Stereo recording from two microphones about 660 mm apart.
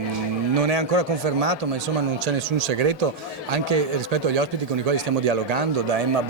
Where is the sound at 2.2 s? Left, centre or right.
Right.